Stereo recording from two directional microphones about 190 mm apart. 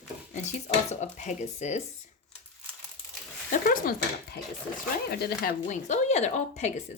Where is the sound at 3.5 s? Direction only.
50° left (ahead or behind).